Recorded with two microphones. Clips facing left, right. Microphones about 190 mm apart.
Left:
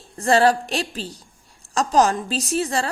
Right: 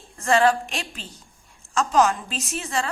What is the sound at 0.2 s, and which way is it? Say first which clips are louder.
A woman's voice: left 2 dB; 35° left (ahead or behind).